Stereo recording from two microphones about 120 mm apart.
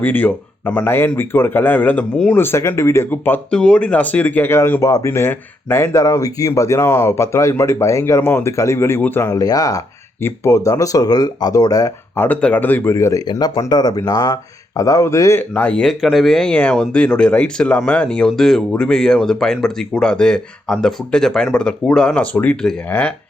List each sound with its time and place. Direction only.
0.0 s speech: 15° left (ahead or behind)
9.4 s speech: 30° left (ahead or behind)
12.1 s speech: 15° left (ahead or behind)